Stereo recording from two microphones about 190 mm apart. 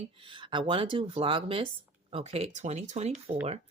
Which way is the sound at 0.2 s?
25° right (ahead or behind).